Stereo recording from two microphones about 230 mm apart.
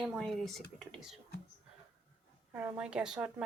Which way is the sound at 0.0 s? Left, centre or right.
Centre.